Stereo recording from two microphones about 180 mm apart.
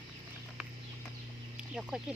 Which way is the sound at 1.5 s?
5° right (ahead or behind).